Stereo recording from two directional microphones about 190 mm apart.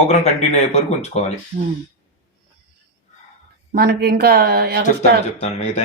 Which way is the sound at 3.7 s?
55° right (ahead or behind).